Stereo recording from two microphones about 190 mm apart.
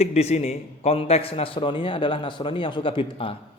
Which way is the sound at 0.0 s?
35° left (ahead or behind).